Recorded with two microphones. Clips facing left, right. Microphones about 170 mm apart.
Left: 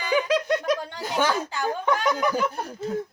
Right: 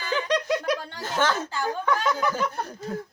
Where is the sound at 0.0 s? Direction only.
10° left (ahead or behind).